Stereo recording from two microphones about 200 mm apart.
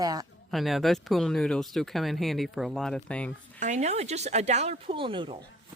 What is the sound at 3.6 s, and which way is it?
Speech, 35° right (ahead or behind).